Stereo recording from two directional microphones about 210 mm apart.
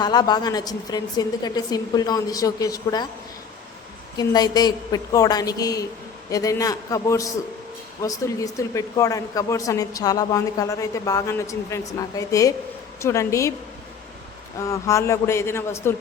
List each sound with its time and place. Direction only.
0.0 s a woman's voice: 20° left (ahead or behind)
4.2 s speech: 20° left (ahead or behind)
14.6 s speech: 15° left (ahead or behind)